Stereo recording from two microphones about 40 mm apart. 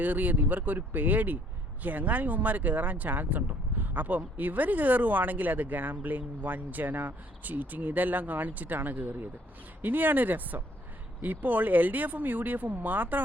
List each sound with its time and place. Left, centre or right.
0.0 s speech: right